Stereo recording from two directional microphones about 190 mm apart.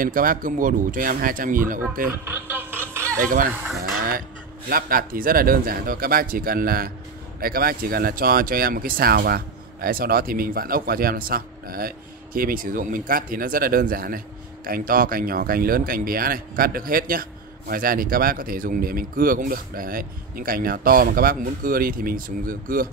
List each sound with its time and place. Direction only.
0.0 s speech: 50° right (ahead or behind)
2.2 s radio: 10° right (ahead or behind)
2.9 s music: 15° right (ahead or behind)
3.2 s speech: 45° right (ahead or behind)
4.6 s speech: 50° right (ahead or behind)